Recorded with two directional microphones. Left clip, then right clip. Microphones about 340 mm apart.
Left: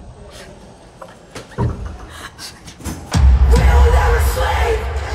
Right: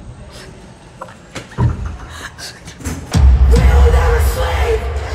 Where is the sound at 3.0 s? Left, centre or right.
Centre.